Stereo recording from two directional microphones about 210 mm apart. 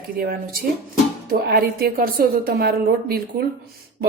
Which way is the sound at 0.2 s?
45° right (ahead or behind).